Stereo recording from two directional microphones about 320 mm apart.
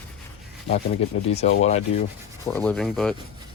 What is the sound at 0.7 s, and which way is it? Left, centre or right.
Speech, centre.